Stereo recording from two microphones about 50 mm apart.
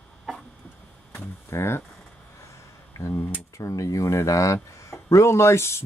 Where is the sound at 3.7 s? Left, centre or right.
Left.